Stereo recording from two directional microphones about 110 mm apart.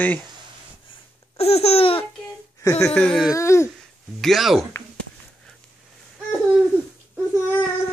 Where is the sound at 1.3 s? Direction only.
70° left (ahead or behind).